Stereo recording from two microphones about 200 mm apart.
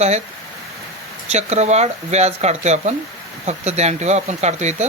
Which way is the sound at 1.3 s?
35° right (ahead or behind).